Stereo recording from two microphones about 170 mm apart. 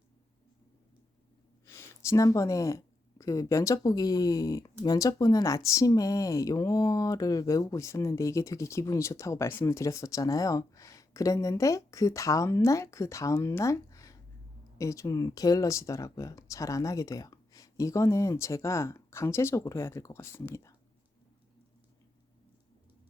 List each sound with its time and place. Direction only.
1.6 s speech: 15° left (ahead or behind)